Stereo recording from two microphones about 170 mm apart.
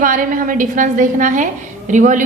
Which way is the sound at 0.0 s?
55° right (ahead or behind).